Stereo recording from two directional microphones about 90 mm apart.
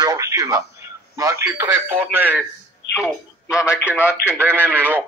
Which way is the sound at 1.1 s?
35° right (ahead or behind).